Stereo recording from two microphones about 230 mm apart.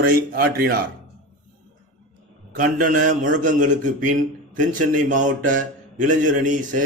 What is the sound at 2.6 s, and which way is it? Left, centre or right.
A man's voice, right.